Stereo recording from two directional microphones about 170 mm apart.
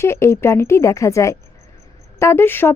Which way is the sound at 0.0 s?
15° left (ahead or behind).